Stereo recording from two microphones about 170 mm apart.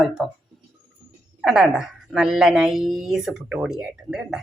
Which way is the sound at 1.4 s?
5° right (ahead or behind).